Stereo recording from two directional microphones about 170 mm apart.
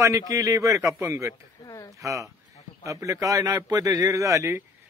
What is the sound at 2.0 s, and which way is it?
Speech, 20° right (ahead or behind).